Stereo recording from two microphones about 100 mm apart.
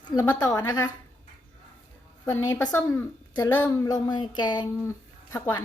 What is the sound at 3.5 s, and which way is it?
Speech, 20° left (ahead or behind).